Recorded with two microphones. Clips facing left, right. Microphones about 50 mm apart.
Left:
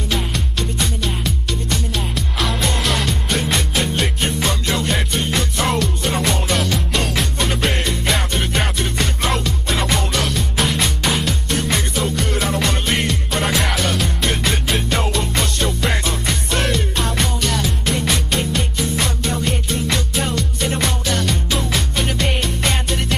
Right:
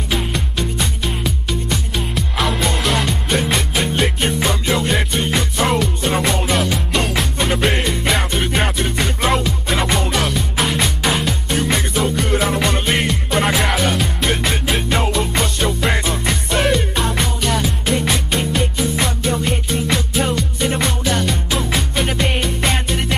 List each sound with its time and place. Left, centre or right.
0.1 s music: centre